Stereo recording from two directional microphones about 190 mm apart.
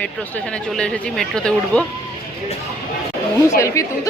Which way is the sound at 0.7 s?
Centre (ahead or behind).